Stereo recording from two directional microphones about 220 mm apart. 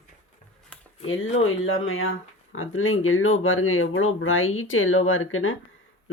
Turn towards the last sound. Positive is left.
turn(degrees=65)  # may be behind; listen again after turning